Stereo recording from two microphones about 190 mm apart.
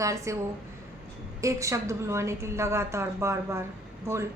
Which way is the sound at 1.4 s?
15° right (ahead or behind).